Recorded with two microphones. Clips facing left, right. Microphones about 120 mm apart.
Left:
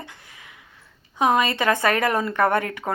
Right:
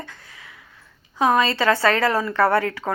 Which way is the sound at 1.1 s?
20° left (ahead or behind).